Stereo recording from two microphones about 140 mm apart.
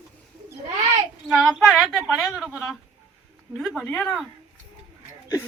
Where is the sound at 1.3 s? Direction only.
5° right (ahead or behind).